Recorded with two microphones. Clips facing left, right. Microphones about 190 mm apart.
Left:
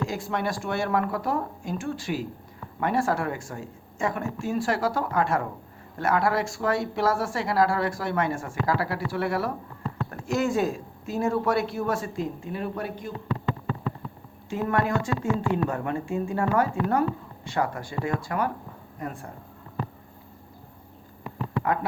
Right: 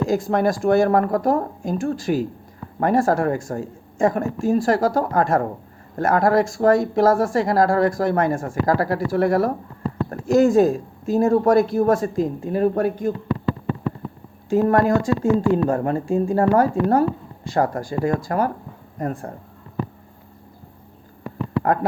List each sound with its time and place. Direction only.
0.1 s speech: 40° right (ahead or behind)
14.5 s speech: 40° right (ahead or behind)
21.2 s a sound: 45° right (ahead or behind)